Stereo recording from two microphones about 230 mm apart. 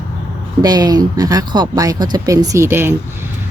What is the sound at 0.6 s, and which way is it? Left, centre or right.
Speech, centre.